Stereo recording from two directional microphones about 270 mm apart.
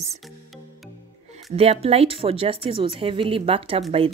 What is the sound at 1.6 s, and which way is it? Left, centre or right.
Speech, right.